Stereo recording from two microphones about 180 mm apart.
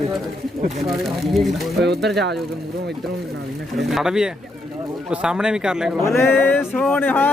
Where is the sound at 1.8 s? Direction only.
65° right (ahead or behind).